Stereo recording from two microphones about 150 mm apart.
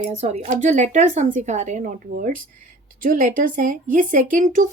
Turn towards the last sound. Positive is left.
turn(degrees=-65)  # may be behind; listen again after turning